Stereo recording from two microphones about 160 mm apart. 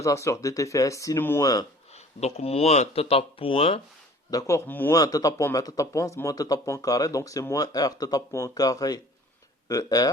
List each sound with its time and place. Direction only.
0.0 s speech: 20° left (ahead or behind)
1.9 s speech: 40° left (ahead or behind)
4.3 s speech: 20° left (ahead or behind)
4.9 s speech: 20° left (ahead or behind)